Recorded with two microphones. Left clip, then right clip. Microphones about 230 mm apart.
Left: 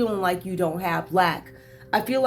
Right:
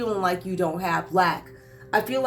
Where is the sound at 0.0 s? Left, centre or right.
Left.